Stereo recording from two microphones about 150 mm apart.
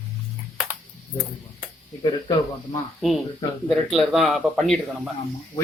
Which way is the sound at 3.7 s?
Centre (ahead or behind).